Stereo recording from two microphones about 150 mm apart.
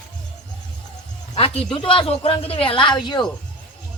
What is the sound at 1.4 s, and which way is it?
Speech, 35° left (ahead or behind).